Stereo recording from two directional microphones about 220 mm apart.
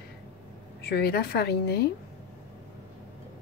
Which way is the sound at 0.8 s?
45° left (ahead or behind).